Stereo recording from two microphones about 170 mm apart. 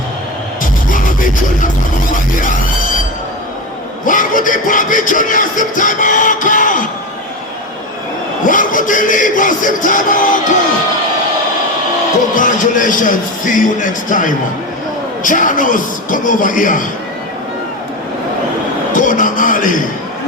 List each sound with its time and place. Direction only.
0.6 s music: 50° left (ahead or behind)
4.0 s music: 50° left (ahead or behind)
8.4 s music: 50° left (ahead or behind)
12.3 s music: 50° left (ahead or behind)
18.9 s a sound: 50° left (ahead or behind)